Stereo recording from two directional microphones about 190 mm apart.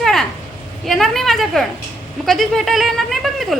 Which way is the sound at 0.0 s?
Centre (ahead or behind).